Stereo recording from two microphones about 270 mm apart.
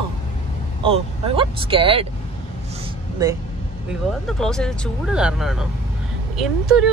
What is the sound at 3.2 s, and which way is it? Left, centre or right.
Speech, centre.